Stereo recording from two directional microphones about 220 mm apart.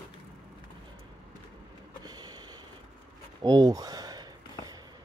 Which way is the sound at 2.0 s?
20° right (ahead or behind).